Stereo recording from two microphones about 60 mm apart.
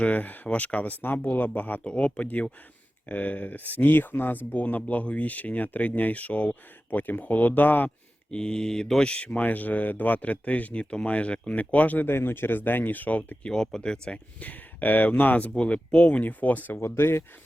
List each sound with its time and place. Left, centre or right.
0.0 s speech: left
1.3 s speech: left
8.3 s speech: centre
13.7 s speech: centre
14.3 s speech: left
15.5 s speech: centre
16.7 s speech: left